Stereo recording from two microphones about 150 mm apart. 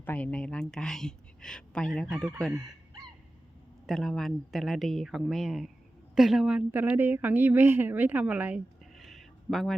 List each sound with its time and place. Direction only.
0.0 s speech: 10° left (ahead or behind)
2.5 s speech: 25° right (ahead or behind)
3.8 s a woman's voice: centre (ahead or behind)